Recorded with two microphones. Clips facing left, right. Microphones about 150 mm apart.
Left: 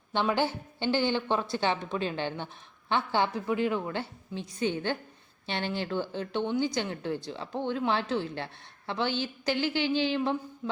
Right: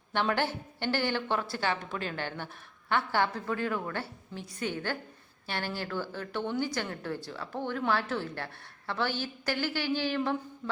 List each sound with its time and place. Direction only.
0.1 s a woman's voice: 15° left (ahead or behind)
10.6 s mantra: 10° left (ahead or behind)